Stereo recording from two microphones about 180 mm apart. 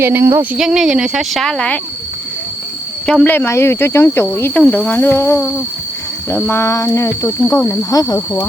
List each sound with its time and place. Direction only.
0.0 s speech: 15° right (ahead or behind); by 1.8 s 5° left (ahead or behind)
3.1 s speech: 10° left (ahead or behind)